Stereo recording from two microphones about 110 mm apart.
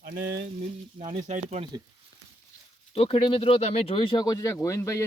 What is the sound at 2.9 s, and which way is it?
Speech, 60° left (ahead or behind).